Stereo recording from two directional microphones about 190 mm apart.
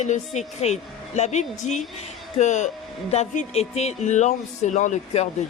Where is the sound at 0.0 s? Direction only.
40° left (ahead or behind).